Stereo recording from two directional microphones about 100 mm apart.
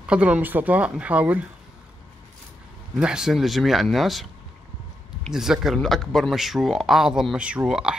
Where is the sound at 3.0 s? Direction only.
5° right (ahead or behind).